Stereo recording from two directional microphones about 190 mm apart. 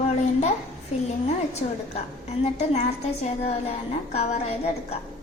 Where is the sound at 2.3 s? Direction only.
35° left (ahead or behind).